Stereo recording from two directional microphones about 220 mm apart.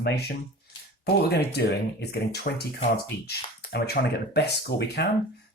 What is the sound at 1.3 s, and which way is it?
Speech, 50° left (ahead or behind).